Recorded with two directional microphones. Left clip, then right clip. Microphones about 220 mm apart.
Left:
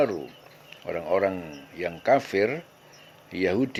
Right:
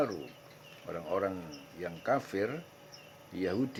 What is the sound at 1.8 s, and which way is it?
Speech, 25° left (ahead or behind).